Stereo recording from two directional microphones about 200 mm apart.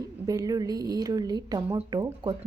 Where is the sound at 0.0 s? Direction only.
20° right (ahead or behind).